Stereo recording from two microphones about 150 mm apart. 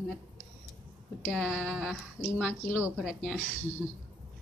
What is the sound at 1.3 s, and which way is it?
Speech, 5° right (ahead or behind).